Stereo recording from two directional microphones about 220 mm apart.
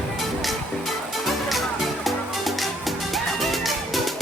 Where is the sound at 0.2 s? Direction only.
Centre (ahead or behind).